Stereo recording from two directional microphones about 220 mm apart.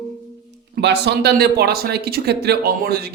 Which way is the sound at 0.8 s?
50° right (ahead or behind).